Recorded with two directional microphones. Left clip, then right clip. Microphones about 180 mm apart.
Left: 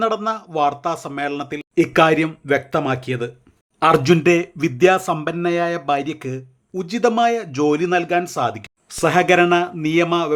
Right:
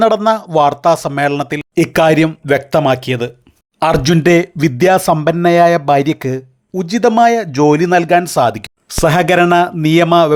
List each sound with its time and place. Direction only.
0.3 s speech: 40° right (ahead or behind)